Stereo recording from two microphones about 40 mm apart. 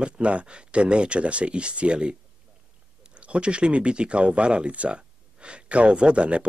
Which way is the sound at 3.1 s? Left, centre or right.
Right.